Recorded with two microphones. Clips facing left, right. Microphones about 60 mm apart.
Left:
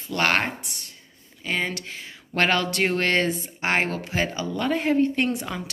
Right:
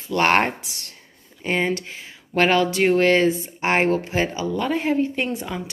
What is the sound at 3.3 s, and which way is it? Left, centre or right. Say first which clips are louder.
Speech: right 3 dB; right.